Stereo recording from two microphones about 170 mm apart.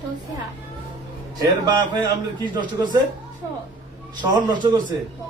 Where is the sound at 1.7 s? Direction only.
25° right (ahead or behind).